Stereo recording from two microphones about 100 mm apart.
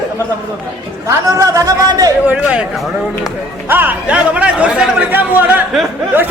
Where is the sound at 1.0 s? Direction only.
35° right (ahead or behind).